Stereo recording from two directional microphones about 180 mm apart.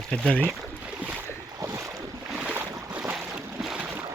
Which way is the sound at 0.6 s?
5° right (ahead or behind).